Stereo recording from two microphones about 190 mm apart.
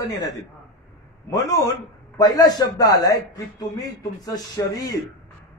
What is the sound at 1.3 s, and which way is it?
A man's voice, 20° left (ahead or behind).